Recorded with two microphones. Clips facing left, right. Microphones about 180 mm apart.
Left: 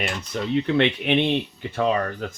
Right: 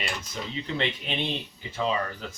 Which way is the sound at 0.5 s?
70° left (ahead or behind).